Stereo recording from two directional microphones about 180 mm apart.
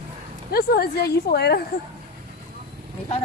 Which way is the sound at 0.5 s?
60° left (ahead or behind).